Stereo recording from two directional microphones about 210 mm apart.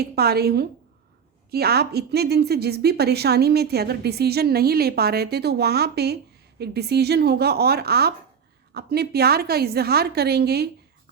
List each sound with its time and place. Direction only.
0.0 s a woman's voice: 50° right (ahead or behind)